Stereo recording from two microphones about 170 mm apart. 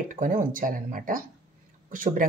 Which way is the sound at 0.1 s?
50° right (ahead or behind).